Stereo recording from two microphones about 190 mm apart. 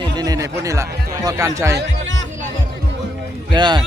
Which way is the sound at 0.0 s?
20° right (ahead or behind).